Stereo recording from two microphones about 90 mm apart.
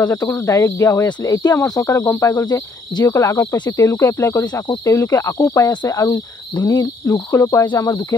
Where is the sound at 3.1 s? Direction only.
35° left (ahead or behind).